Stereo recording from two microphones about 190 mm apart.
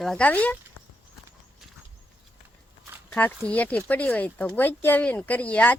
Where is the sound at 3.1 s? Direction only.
10° left (ahead or behind).